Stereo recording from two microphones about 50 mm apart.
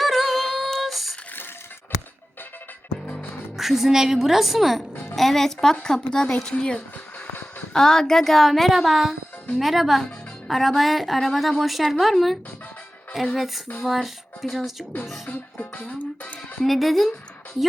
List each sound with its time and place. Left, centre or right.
0.0 s music: centre
0.7 s a sound: centre
3.6 s a woman's voice: centre
15.3 s music: left
16.6 s a woman's voice: centre